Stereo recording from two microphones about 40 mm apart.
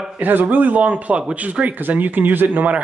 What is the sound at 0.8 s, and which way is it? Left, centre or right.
Speech, right.